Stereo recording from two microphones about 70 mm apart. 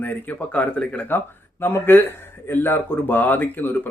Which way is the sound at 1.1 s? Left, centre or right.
Left.